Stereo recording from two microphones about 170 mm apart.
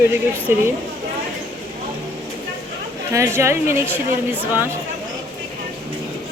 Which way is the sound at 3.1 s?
15° right (ahead or behind).